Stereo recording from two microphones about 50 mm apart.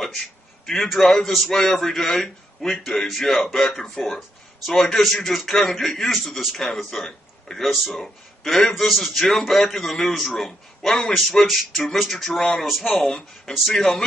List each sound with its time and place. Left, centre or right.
0.0 s a man's voice: centre
11.4 s speech: centre
11.7 s a man's voice: centre